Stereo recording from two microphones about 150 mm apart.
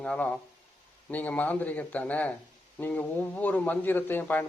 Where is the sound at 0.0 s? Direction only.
5° left (ahead or behind).